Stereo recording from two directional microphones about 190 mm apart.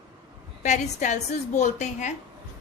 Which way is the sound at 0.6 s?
40° left (ahead or behind).